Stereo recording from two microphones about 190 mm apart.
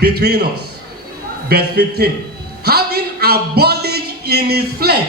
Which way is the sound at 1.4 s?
55° right (ahead or behind).